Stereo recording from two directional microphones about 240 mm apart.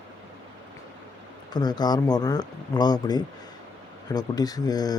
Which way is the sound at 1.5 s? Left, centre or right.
Centre.